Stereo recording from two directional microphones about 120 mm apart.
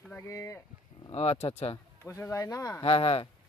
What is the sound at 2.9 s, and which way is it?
Speech, 50° left (ahead or behind).